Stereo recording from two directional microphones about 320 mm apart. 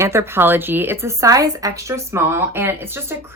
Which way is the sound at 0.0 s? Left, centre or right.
Centre.